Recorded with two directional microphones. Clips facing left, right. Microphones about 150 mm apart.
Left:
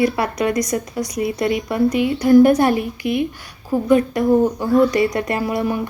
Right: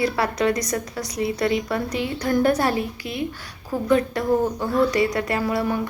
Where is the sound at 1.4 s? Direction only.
15° left (ahead or behind).